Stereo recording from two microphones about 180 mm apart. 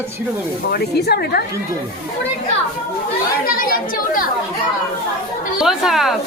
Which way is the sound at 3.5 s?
50° left (ahead or behind).